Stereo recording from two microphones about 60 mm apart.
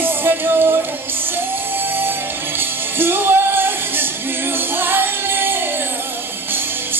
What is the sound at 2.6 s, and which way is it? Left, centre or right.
Music, right.